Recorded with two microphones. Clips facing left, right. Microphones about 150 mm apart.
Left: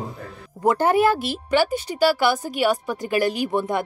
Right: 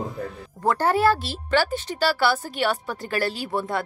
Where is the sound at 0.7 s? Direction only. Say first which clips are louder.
Left 2 dB; 15° left (ahead or behind).